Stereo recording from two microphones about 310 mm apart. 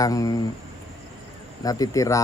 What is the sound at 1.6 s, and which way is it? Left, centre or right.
Speech, centre.